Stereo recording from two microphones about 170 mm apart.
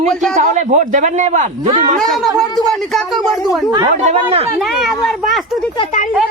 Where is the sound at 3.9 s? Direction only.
45° right (ahead or behind).